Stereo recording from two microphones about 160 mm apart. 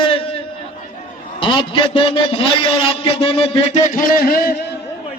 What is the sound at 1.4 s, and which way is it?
A man's voice, 30° left (ahead or behind).